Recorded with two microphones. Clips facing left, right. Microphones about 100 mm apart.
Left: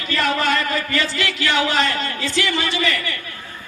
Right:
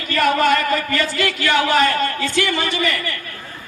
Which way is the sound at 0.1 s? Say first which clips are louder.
Right 4 dB; 50° right (ahead or behind).